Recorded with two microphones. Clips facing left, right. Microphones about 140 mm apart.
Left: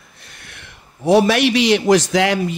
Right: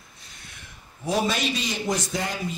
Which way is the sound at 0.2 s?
65° left (ahead or behind).